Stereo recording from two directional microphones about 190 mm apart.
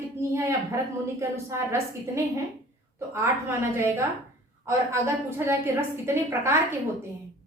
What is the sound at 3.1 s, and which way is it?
A woman's voice, 15° right (ahead or behind).